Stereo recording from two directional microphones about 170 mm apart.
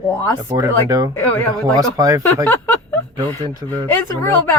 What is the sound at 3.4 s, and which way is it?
Speech, 20° right (ahead or behind).